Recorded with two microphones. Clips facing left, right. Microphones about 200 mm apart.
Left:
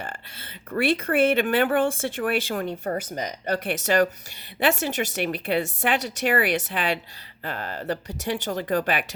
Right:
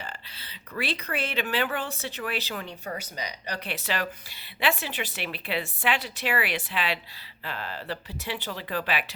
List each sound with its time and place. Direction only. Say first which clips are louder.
0.0 s speech: left 4 dB; 50° left (ahead or behind)